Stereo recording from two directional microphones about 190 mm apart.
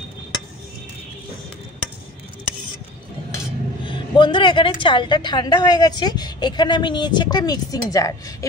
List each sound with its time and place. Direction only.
3.8 s a woman's voice: 25° left (ahead or behind)